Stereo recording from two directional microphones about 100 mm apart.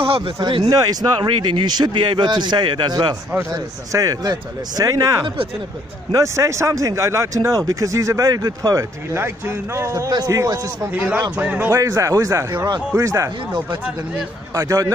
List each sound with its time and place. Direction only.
0.0 s a sound: 70° right (ahead or behind)
0.4 s speech: 55° right (ahead or behind)
0.7 s speech: 40° right (ahead or behind)
3.3 s speech: 30° right (ahead or behind)
6.1 s speech: 30° right (ahead or behind)
11.3 s a man's voice: 15° right (ahead or behind)
11.7 s speech: 30° right (ahead or behind)
14.5 s speech: 35° right (ahead or behind)